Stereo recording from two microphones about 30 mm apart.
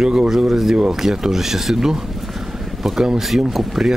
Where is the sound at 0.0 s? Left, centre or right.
Right.